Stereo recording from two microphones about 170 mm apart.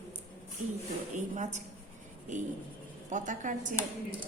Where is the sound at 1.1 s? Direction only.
45° right (ahead or behind).